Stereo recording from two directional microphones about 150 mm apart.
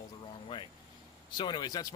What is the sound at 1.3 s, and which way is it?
Speech, 30° left (ahead or behind).